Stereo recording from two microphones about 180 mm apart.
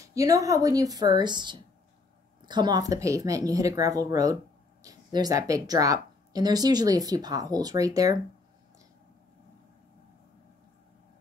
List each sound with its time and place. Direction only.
0.0 s speech: 20° right (ahead or behind)